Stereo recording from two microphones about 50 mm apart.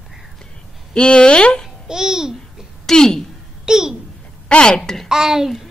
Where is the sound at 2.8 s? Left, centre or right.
Centre.